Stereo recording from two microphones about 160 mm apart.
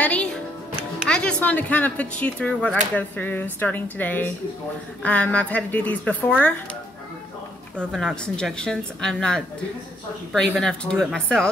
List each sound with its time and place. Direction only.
0.0 s music: 10° left (ahead or behind)
1.0 s speech: 5° left (ahead or behind)
7.9 s a woman's voice: 5° left (ahead or behind)